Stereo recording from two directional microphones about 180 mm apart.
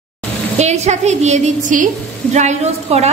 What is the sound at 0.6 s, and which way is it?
A man's voice, 40° right (ahead or behind).